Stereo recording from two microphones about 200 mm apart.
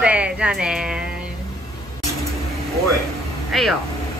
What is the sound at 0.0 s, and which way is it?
Speech, 5° right (ahead or behind).